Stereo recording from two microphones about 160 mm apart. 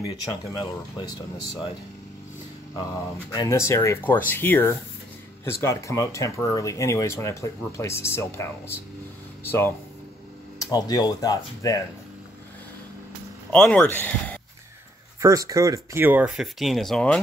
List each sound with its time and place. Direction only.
3.3 s speech: 20° left (ahead or behind)
13.5 s speech: 10° left (ahead or behind)
15.1 s speech: 20° right (ahead or behind); by 17.2 s 5° left (ahead or behind)